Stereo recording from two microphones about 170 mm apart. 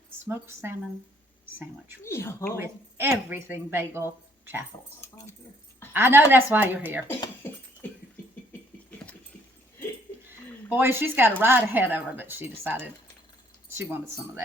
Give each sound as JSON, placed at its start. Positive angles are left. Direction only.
{"t": 0.3, "sound": "speech", "side_deg": -15}
{"t": 2.0, "sound": "speech", "side_deg": 15}
{"t": 2.6, "sound": "speech", "side_deg": -15}
{"t": 4.9, "sound": "speech", "side_deg": 15}
{"t": 5.9, "sound": "speech", "side_deg": -10}
{"t": 10.7, "sound": "speech", "side_deg": -10}